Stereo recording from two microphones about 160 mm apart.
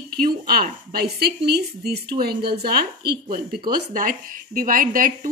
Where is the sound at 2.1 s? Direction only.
80° right.